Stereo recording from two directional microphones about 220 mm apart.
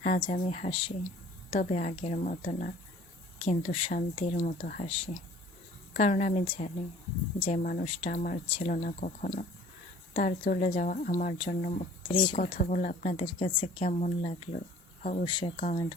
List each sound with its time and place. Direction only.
0.3 s a woman's voice: 35° left (ahead or behind)
4.4 s a woman's voice: 40° left (ahead or behind)
5.9 s a woman's voice: 35° left (ahead or behind)
7.6 s a woman's voice: 40° left (ahead or behind)
8.4 s speech: 25° left (ahead or behind)
8.7 s a woman's voice: 35° left (ahead or behind)
12.4 s a woman's voice: 35° left (ahead or behind)
13.2 s speech: 25° left (ahead or behind)
15.5 s a woman's voice: 35° left (ahead or behind)